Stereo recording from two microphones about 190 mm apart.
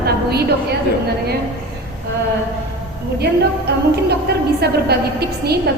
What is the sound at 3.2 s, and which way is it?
A woman's voice, 60° right (ahead or behind).